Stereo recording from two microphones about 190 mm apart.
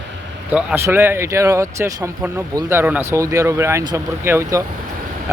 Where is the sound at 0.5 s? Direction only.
10° right (ahead or behind).